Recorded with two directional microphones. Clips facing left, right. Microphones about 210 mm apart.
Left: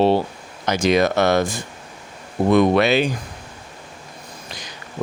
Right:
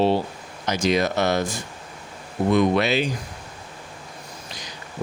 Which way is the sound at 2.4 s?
55° left (ahead or behind).